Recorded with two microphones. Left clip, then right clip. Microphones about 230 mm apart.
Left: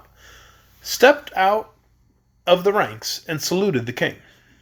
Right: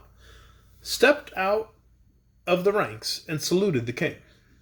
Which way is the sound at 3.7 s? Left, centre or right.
Left.